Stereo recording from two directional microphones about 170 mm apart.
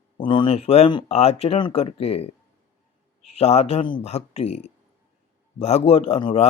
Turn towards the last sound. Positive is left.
turn(degrees=35)  # may be behind; listen again after turning